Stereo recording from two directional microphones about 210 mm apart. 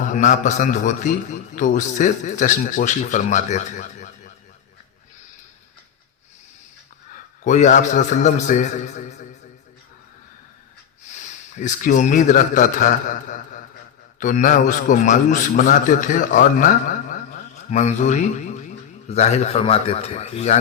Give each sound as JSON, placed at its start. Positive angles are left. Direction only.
{"t": 0.0, "sound": "a man's voice", "side_deg": 35}
{"t": 7.4, "sound": "a man's voice", "side_deg": 35}
{"t": 11.6, "sound": "a man's voice", "side_deg": 35}